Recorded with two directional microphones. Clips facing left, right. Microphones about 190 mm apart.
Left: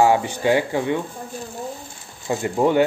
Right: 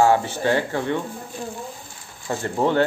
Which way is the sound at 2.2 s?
15° left (ahead or behind).